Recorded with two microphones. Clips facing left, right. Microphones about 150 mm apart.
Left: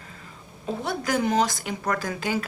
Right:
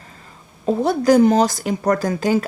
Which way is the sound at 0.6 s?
40° right (ahead or behind).